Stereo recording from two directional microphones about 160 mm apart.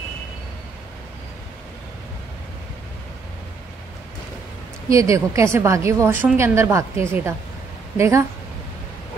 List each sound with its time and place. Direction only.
4.8 s a woman's voice: 20° right (ahead or behind)